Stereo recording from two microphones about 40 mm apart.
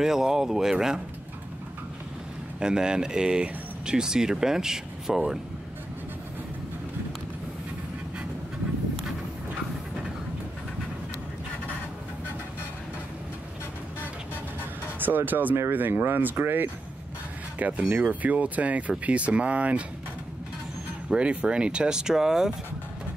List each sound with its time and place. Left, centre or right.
0.0 s speech: centre
2.6 s speech: centre
15.0 s speech: right
17.6 s speech: right
21.1 s speech: right